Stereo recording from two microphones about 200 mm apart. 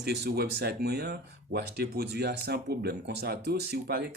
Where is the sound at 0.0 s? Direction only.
55° right (ahead or behind).